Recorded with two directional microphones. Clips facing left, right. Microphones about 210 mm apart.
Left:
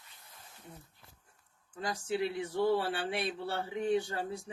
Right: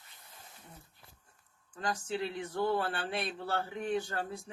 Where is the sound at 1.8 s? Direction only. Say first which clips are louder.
Left 2 dB; 10° left (ahead or behind).